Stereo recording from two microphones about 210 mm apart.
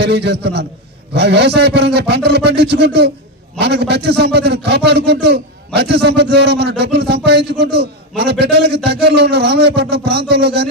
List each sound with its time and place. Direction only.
0.0 s a man's voice: 55° right (ahead or behind)